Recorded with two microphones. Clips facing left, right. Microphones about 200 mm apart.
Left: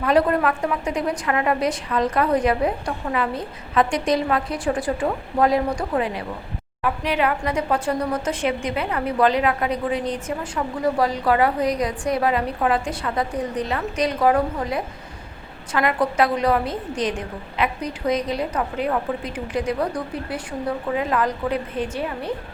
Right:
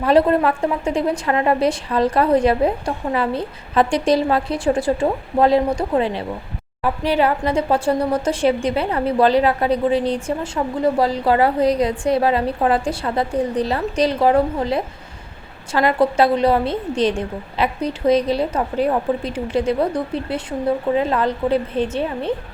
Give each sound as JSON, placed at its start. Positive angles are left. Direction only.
{"t": 0.0, "sound": "a woman's voice", "side_deg": -30}